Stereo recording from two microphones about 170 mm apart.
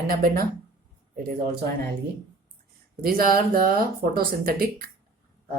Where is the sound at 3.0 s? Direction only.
60° right (ahead or behind).